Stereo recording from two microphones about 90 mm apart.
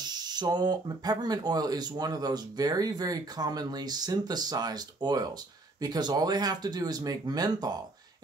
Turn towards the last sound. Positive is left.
turn(degrees=-45)  # may be behind; listen again after turning